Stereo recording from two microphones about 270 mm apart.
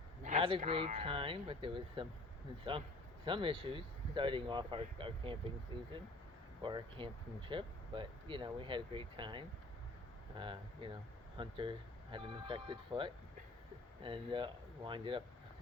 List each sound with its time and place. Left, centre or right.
0.2 s speech: right
3.2 s speech: centre